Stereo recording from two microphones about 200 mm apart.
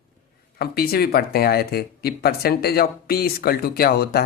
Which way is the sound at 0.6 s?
50° left (ahead or behind).